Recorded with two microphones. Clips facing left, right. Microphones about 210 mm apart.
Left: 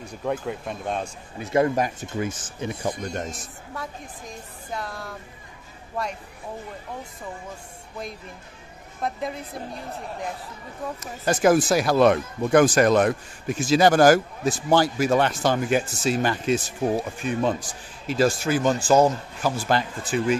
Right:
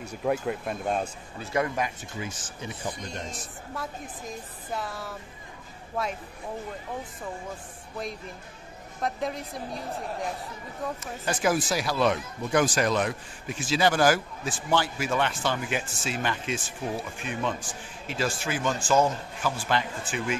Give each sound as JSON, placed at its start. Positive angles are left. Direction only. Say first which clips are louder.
{"t": 0.0, "sound": "speech", "louder": "even", "side_deg": -5}
{"t": 1.4, "sound": "speech", "louder": "left 7 dB", "side_deg": 25}
{"t": 1.8, "sound": "speech", "louder": "left 6 dB", "side_deg": 50}
{"t": 4.7, "sound": "speech", "louder": "left 1 dB", "side_deg": -5}
{"t": 9.0, "sound": "speech", "louder": "left 1 dB", "side_deg": 0}
{"t": 11.0, "sound": "speech", "louder": "left 7 dB", "side_deg": 45}